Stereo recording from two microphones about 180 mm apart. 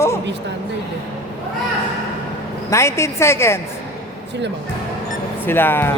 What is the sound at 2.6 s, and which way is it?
Speech, 15° left (ahead or behind).